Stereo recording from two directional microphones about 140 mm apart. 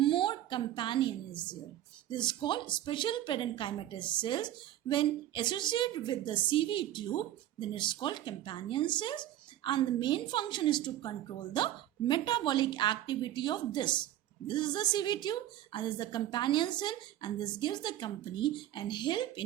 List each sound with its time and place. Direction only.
0.0 s a woman's voice: 35° left (ahead or behind)